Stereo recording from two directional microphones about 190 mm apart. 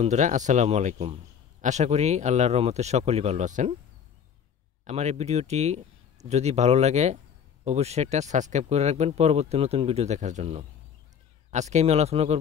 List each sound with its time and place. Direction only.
0.0 s speech: 40° right (ahead or behind)
4.8 s speech: 35° right (ahead or behind)